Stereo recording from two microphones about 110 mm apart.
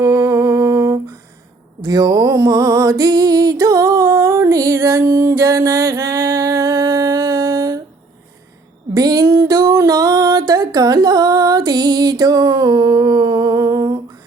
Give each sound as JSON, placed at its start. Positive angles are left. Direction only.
{"t": 0.0, "sound": "humming", "side_deg": -30}
{"t": 1.8, "sound": "music", "side_deg": -35}
{"t": 9.0, "sound": "music", "side_deg": -35}